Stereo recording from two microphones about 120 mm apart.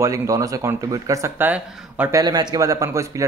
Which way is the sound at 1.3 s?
15° right (ahead or behind).